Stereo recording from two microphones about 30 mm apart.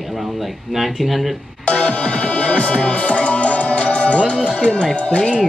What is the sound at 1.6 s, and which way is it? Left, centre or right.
Music, left.